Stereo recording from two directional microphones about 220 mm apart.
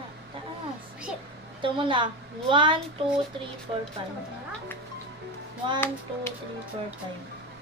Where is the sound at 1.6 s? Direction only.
20° right (ahead or behind).